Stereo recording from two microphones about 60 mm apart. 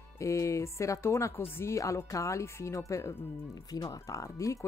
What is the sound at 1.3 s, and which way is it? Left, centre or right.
Speech, left.